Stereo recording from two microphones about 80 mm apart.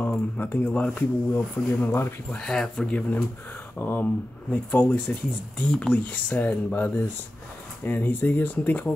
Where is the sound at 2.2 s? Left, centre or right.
Centre.